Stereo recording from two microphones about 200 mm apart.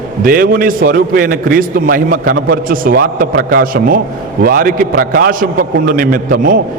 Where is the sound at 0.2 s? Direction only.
45° right (ahead or behind).